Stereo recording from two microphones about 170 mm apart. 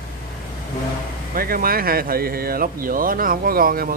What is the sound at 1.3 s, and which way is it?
Speech, 60° right (ahead or behind).